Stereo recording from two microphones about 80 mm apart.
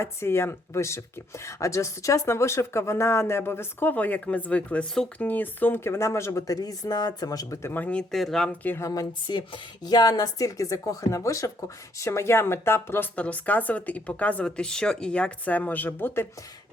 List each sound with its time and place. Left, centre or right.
0.0 s speech: left
6.5 s speech: left
7.6 s speech: left
8.1 s speech: centre
9.2 s speech: left
13.1 s speech: centre